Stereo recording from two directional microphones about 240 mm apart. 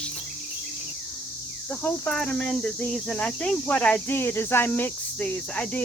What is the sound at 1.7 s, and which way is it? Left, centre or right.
Speech, centre.